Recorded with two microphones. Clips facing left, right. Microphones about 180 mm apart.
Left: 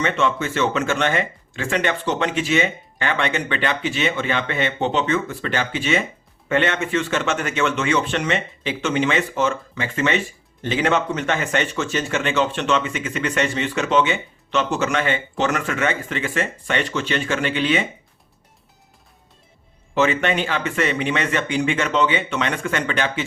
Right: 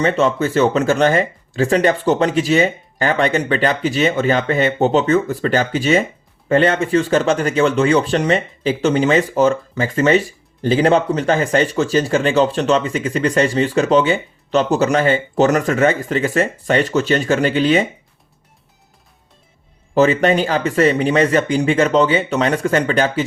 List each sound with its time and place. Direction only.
0.0 s speech: 35° right (ahead or behind)
19.9 s speech: 35° right (ahead or behind)